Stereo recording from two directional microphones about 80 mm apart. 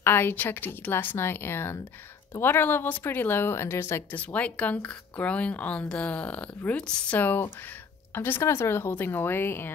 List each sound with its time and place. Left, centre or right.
0.0 s speech: left
4.1 s speech: centre